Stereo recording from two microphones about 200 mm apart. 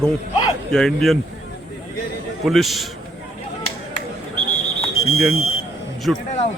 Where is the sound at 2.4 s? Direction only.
Centre (ahead or behind).